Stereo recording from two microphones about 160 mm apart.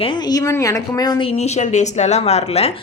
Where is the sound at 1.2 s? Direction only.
45° left (ahead or behind).